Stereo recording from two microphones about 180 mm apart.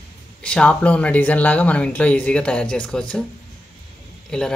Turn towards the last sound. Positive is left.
turn(degrees=5)  # may be behind; listen again after turning